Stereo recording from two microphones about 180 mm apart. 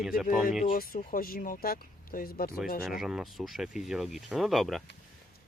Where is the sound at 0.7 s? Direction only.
55° left (ahead or behind).